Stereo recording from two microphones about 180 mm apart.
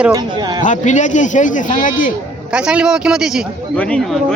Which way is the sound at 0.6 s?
45° left (ahead or behind).